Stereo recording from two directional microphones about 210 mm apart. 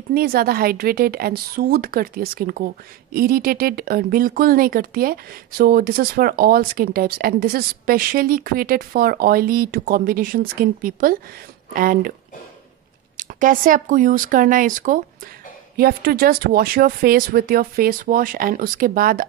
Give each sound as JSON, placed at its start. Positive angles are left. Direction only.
{"t": 0.1, "sound": "a woman's voice", "side_deg": -45}
{"t": 13.2, "sound": "a woman's voice", "side_deg": -40}